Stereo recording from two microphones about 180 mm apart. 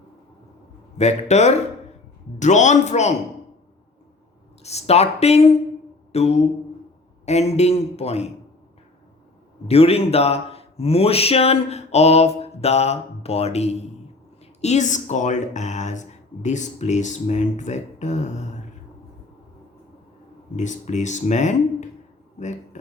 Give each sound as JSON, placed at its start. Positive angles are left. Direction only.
{"t": 0.9, "sound": "speech", "side_deg": 40}
{"t": 4.6, "sound": "speech", "side_deg": 35}
{"t": 6.1, "sound": "a sound", "side_deg": 35}
{"t": 7.3, "sound": "speech", "side_deg": 35}
{"t": 9.6, "sound": "speech", "side_deg": 35}
{"t": 20.6, "sound": "speech", "side_deg": 40}
{"t": 22.4, "sound": "a sound", "side_deg": 40}